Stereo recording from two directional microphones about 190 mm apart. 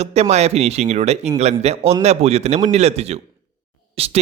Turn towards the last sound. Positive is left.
turn(degrees=-30)  # may be behind; listen again after turning